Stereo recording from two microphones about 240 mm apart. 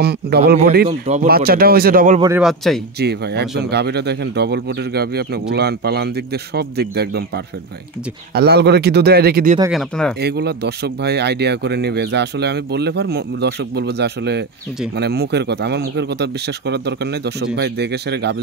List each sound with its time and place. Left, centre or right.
0.6 s speech: right
2.1 s speech: centre
2.4 s speech: centre
3.0 s speech: right
8.4 s speech: right
9.7 s speech: centre
10.2 s speech: right